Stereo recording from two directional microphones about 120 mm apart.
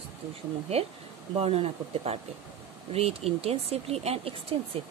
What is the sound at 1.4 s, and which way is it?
Speech, 55° right (ahead or behind).